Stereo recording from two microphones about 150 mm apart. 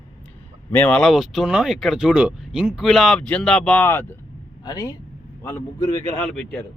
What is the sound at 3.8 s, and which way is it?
Speech, 15° left (ahead or behind).